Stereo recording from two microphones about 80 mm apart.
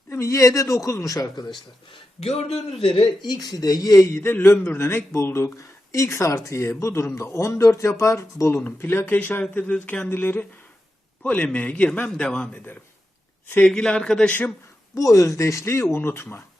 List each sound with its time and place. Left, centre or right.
0.1 s a man's voice: left
2.9 s a man's voice: left
9.4 s a man's voice: centre
13.7 s a man's voice: centre
14.9 s a man's voice: left